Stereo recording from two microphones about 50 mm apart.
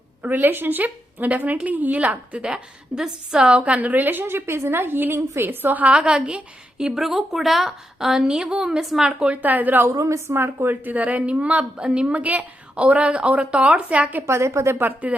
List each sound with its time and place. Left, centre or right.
0.2 s a woman's voice: right; by 3.5 s centre
3.5 s a woman's voice: right
3.8 s a woman's voice: right
5.9 s a woman's voice: centre
6.8 s a woman's voice: centre
8.8 s a woman's voice: centre
9.0 s a woman's voice: right
9.4 s a woman's voice: right
10.0 s a woman's voice: right
10.3 s a woman's voice: right
10.8 s a woman's voice: right
14.3 s a woman's voice: right